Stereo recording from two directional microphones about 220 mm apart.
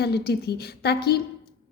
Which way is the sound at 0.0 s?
45° left (ahead or behind).